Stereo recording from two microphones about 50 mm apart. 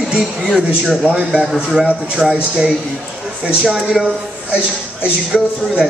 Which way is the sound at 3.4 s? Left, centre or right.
Centre.